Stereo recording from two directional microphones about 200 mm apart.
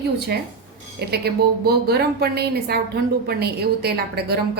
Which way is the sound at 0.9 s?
55° right (ahead or behind).